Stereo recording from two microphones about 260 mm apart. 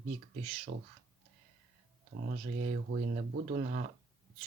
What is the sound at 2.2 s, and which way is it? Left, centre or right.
Speech, right.